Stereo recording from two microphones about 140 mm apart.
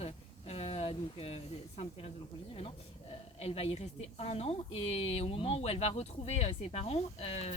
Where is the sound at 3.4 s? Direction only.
45° left (ahead or behind).